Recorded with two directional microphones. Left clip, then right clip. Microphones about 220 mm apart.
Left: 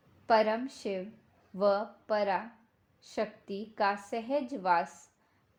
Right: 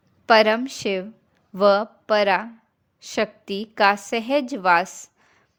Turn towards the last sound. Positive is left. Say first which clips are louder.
# right 10 dB
turn(degrees=-35)  # may be behind; listen again after turning